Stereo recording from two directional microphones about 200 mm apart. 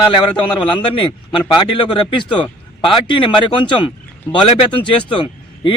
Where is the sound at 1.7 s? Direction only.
25° left (ahead or behind).